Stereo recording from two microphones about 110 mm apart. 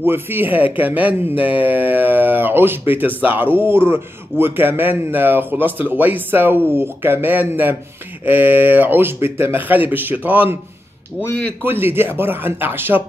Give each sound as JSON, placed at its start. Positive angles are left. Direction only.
{"t": 0.0, "sound": "a man's voice", "side_deg": -20}
{"t": 11.6, "sound": "a man's voice", "side_deg": -20}